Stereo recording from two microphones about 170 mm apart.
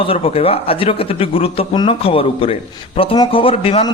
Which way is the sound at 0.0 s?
35° left (ahead or behind).